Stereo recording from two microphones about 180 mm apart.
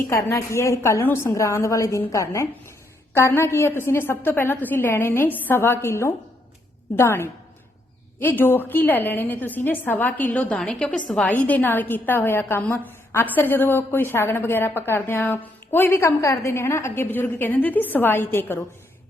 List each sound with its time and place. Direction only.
0.1 s a woman's voice: 15° left (ahead or behind)